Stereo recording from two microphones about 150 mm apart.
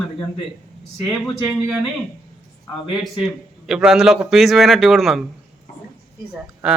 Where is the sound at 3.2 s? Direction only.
5° right (ahead or behind).